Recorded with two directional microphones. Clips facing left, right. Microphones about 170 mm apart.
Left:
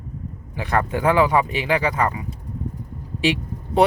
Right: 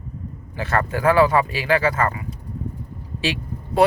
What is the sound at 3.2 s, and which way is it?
Vehicle, 20° left (ahead or behind).